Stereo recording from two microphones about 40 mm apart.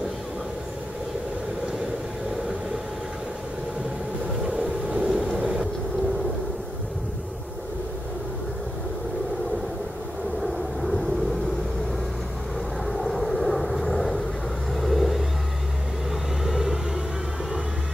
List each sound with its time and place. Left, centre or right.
4.5 s vehicle: right
10.4 s vehicle: centre
12.8 s vehicle: centre
16.4 s vehicle: centre